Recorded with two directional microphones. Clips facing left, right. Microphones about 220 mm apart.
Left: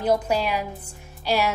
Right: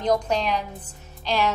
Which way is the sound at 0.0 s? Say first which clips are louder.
Left 1 dB; 5° left (ahead or behind).